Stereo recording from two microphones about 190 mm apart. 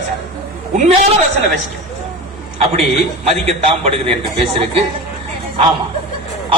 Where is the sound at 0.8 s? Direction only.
35° right (ahead or behind).